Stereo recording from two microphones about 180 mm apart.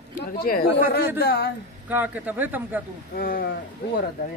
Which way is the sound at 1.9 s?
10° right (ahead or behind).